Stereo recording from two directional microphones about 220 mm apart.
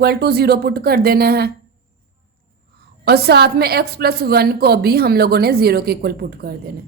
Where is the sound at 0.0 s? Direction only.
45° right (ahead or behind).